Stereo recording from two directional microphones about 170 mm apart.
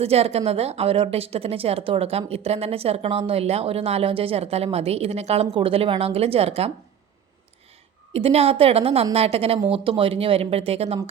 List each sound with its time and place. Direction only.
0.0 s a woman's voice: 35° right (ahead or behind)
8.1 s a woman's voice: 35° right (ahead or behind)